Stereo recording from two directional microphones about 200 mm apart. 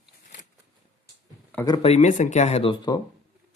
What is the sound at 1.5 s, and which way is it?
Speech, 20° left (ahead or behind).